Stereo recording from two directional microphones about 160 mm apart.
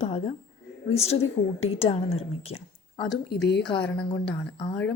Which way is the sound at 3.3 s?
90° left.